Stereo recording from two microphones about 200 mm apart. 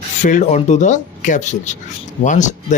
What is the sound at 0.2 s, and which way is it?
Speech, 40° left (ahead or behind).